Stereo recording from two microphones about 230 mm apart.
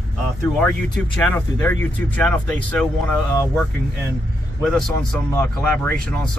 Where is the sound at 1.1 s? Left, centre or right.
Centre.